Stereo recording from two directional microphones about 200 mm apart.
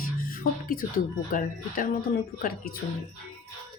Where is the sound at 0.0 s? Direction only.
45° left (ahead or behind).